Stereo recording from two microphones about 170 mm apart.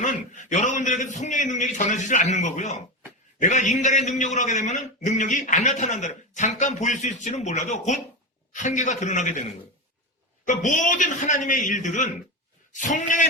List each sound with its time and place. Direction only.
0.0 s a man's voice: 45° left (ahead or behind)